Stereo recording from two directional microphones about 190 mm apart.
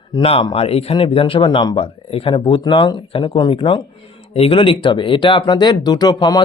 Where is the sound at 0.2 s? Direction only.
30° left (ahead or behind).